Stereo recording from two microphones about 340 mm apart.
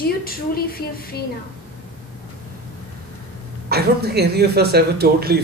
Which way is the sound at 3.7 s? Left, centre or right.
Right.